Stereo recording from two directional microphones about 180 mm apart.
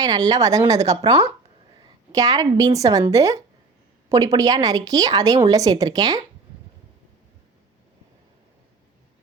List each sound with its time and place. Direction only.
0.0 s a woman's voice: 20° right (ahead or behind)